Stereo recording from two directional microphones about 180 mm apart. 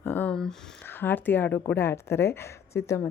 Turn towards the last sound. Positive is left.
turn(degrees=15)  # may be behind; listen again after turning